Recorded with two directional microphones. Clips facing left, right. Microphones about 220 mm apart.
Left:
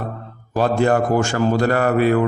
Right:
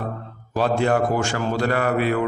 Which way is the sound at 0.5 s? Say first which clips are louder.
Left 3 dB; 45° left (ahead or behind).